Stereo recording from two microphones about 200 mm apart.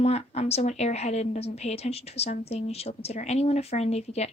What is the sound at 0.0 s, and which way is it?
A woman's voice, 30° left (ahead or behind).